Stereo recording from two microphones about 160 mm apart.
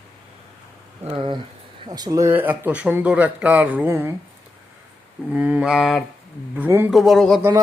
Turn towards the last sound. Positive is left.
turn(degrees=0)  # may be behind; listen again after turning